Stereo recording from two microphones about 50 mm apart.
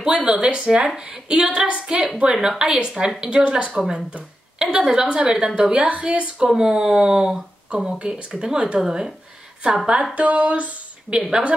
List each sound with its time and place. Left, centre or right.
0.0 s a woman's voice: centre
6.5 s speech: centre
10.1 s speech: right
11.1 s speech: centre